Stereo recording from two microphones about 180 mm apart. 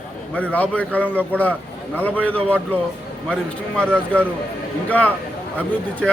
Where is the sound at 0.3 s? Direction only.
10° left (ahead or behind).